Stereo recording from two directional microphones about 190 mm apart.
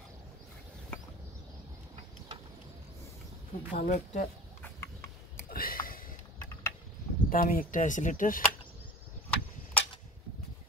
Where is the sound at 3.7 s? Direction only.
45° left (ahead or behind).